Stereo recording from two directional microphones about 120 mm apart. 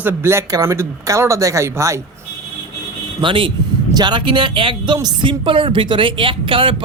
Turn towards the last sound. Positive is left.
turn(degrees=-45)  # may be behind; listen again after turning